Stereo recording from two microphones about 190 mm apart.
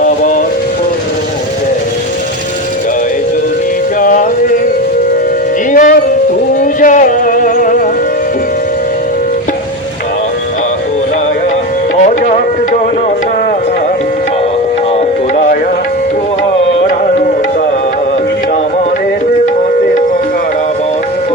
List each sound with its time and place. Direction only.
0.0 s music: 45° left (ahead or behind)
4.0 s music: 45° left (ahead or behind)
5.7 s music: 45° left (ahead or behind)